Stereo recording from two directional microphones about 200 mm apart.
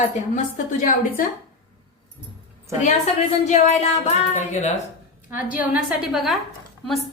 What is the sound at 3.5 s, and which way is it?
A woman's voice, 35° left (ahead or behind).